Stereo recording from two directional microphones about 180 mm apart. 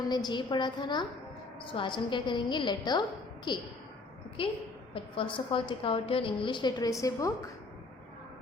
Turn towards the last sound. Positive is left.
turn(degrees=20)  # may be behind; listen again after turning